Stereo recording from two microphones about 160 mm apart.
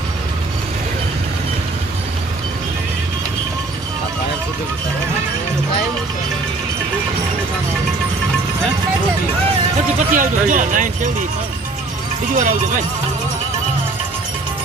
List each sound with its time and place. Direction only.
10.1 s speech: 55° right (ahead or behind)
12.3 s speech: 55° right (ahead or behind)